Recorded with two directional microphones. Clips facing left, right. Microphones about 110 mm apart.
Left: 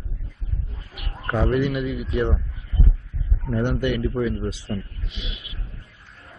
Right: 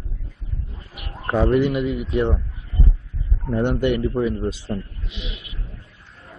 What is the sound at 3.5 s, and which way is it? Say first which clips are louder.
A man's voice: right 3 dB; 25° right (ahead or behind).